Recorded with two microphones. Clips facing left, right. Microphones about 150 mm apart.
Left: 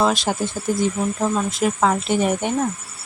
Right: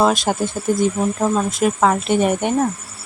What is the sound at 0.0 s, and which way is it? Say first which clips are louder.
Speech: right 3 dB; 50° right (ahead or behind).